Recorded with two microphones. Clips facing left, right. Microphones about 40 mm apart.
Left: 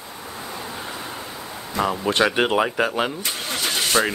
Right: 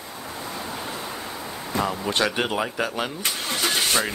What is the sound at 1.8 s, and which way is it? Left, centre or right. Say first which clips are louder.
Speech: left 4 dB; left.